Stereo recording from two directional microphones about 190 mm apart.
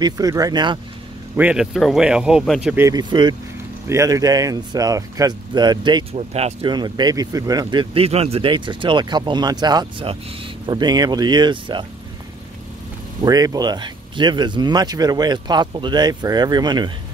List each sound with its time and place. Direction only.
0.0 s speech: 20° right (ahead or behind)
1.3 s speech: 5° right (ahead or behind)
2.7 s speech: 15° right (ahead or behind)
13.2 s speech: 20° right (ahead or behind)